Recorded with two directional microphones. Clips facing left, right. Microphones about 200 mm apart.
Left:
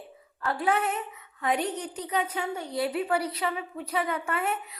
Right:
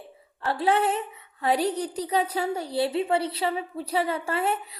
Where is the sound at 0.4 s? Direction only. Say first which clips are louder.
Right 3 dB; 30° right (ahead or behind).